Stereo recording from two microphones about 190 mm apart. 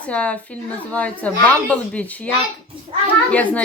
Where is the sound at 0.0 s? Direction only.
5° left (ahead or behind).